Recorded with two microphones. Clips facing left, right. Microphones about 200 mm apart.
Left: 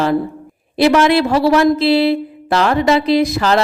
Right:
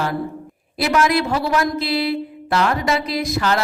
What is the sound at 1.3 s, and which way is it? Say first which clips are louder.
Speech: left 8 dB; 90° left.